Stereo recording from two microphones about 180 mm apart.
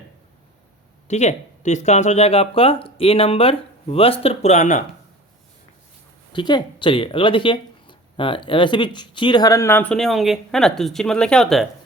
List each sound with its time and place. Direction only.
1.0 s speech: 40° left (ahead or behind)
6.3 s speech: 25° left (ahead or behind); by 11.6 s 5° left (ahead or behind)